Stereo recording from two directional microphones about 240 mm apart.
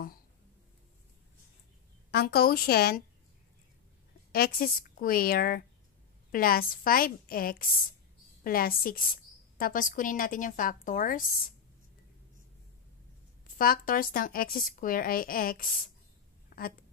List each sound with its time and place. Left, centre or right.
2.0 s speech: left
4.3 s speech: left
13.6 s speech: left
16.4 s a sound: left